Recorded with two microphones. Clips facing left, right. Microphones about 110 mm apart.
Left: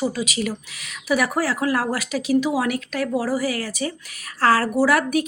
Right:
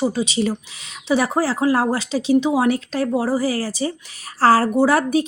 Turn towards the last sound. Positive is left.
turn(degrees=-30)  # may be behind; listen again after turning